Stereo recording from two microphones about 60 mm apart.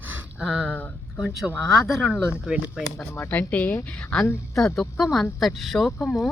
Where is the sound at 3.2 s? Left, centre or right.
Left.